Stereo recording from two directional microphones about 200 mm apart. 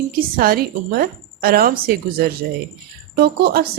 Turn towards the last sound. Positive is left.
turn(degrees=-50)  # may be behind; listen again after turning